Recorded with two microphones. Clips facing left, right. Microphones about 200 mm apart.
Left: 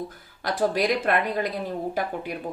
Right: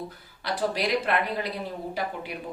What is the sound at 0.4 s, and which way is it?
Speech, 50° left (ahead or behind).